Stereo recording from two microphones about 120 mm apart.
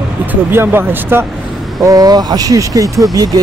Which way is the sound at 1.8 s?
30° right (ahead or behind).